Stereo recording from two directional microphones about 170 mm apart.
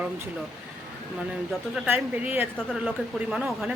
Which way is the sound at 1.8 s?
10° right (ahead or behind).